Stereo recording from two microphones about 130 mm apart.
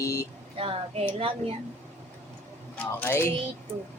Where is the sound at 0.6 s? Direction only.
45° right (ahead or behind).